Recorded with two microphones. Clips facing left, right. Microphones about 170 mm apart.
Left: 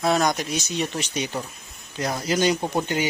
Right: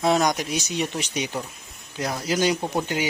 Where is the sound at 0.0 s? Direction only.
15° right (ahead or behind).